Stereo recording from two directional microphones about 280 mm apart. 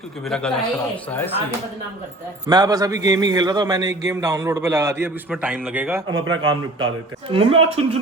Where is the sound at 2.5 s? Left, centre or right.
Centre.